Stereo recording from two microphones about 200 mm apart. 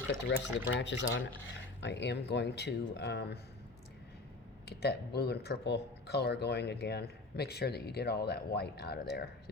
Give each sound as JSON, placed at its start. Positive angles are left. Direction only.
{"t": 0.1, "sound": "speech", "side_deg": 60}
{"t": 4.6, "sound": "speech", "side_deg": 55}